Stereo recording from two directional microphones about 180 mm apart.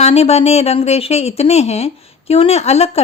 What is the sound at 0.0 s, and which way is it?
Speech, 35° left (ahead or behind).